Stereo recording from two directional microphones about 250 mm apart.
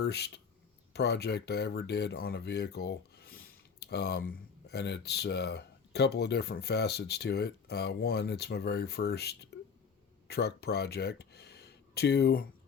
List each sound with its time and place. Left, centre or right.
0.0 s speech: left